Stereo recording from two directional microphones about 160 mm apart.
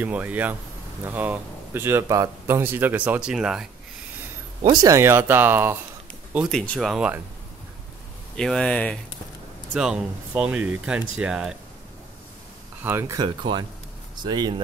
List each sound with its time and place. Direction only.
0.0 s speech: 10° right (ahead or behind)
4.6 s speech: 20° right (ahead or behind); by 7.2 s 5° right (ahead or behind)
8.4 s speech: 5° left (ahead or behind)
9.8 s speech: 5° right (ahead or behind)
12.8 s speech: 20° right (ahead or behind)